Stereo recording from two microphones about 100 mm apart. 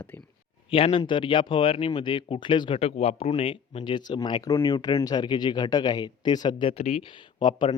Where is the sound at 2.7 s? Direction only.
90° left; by 6.7 s 50° left (ahead or behind).